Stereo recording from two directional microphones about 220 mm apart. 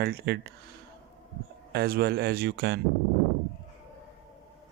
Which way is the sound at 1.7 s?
45° right (ahead or behind).